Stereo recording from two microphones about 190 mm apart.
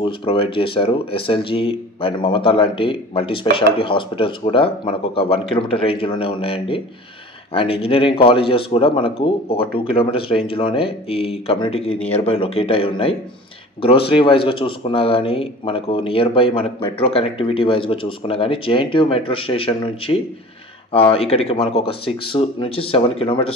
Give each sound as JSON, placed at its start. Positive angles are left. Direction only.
{"t": 0.0, "sound": "speech", "side_deg": 25}